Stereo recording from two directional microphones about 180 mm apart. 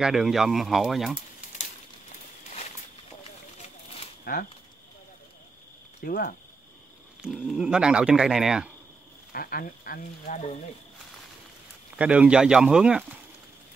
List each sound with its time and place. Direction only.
0.0 s speech: centre (ahead or behind)
3.6 s a sound: 35° left (ahead or behind)
4.2 s a sound: 55° left (ahead or behind)
6.0 s speech: 55° left (ahead or behind)
7.2 s speech: 5° right (ahead or behind)
9.3 s speech: 55° left (ahead or behind); by 10.6 s 40° left (ahead or behind)
12.0 s speech: 5° right (ahead or behind)